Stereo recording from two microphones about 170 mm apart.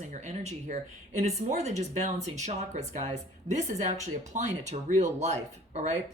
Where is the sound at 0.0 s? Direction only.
45° right (ahead or behind).